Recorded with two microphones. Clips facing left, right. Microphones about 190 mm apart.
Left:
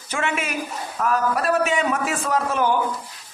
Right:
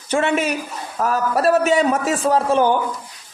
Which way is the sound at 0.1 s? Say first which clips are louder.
Right 7 dB; 35° right (ahead or behind).